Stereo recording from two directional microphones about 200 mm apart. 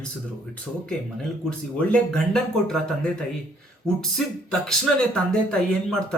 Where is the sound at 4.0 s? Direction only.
5° left (ahead or behind).